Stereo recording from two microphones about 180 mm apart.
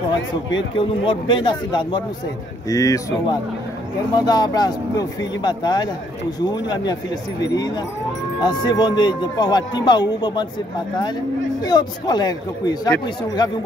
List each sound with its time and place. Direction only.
0.7 s speech: 25° left (ahead or behind)
11.6 s speech: 20° left (ahead or behind)